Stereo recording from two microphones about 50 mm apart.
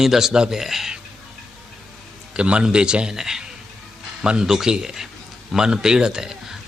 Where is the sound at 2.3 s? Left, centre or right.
Right.